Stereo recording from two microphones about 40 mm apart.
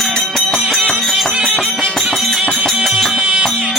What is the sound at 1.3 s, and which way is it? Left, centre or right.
Music, right.